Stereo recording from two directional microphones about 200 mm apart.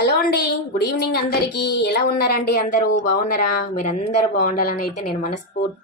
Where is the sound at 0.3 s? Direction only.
55° left (ahead or behind).